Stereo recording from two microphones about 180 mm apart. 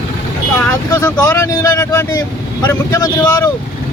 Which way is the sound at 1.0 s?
15° left (ahead or behind).